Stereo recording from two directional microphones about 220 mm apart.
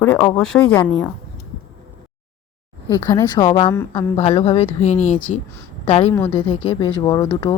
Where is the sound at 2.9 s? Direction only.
15° left (ahead or behind).